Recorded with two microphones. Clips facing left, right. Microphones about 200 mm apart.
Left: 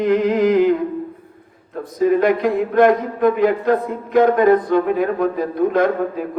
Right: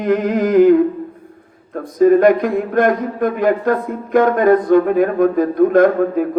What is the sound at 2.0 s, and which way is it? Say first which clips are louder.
Speech: right 5 dB; 50° right (ahead or behind).